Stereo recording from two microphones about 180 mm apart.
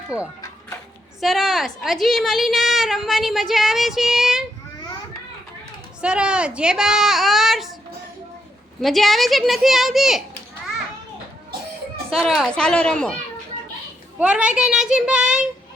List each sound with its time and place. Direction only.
0.1 s speech: 20° left (ahead or behind)
1.2 s a woman's voice: centre (ahead or behind)
6.0 s speech: 5° right (ahead or behind)
8.8 s a woman's voice: centre (ahead or behind)
12.1 s a woman's voice: centre (ahead or behind)
14.2 s a woman's voice: 5° right (ahead or behind)